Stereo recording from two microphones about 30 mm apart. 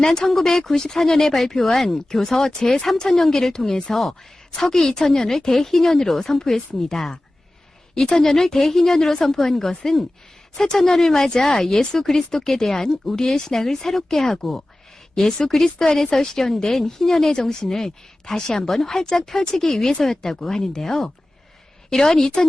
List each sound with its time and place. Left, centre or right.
0.0 s speech: left
0.3 s a woman's voice: centre